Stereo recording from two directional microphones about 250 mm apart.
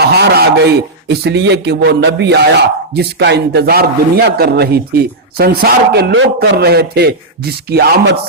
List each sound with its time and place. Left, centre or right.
0.0 s a man's voice: right